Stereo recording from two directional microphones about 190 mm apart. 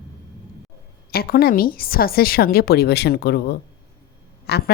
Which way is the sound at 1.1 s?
55° left (ahead or behind).